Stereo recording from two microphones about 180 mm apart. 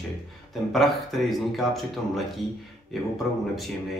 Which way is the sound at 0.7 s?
Centre (ahead or behind).